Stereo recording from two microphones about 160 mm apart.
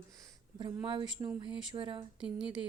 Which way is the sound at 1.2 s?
30° right (ahead or behind).